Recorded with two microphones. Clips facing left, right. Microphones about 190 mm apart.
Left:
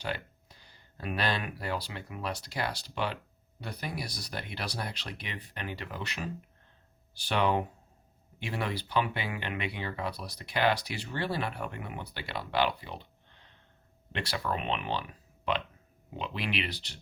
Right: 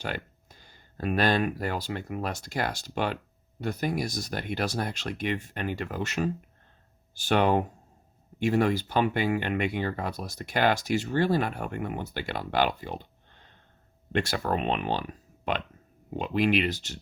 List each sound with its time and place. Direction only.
0.0 s speech: 50° right (ahead or behind)
14.1 s speech: 50° right (ahead or behind)
16.0 s speech: 45° right (ahead or behind)